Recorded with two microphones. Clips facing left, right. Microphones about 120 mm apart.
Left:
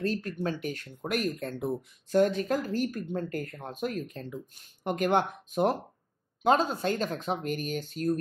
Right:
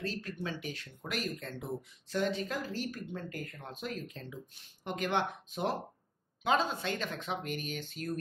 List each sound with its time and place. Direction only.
0.0 s speech: 50° left (ahead or behind)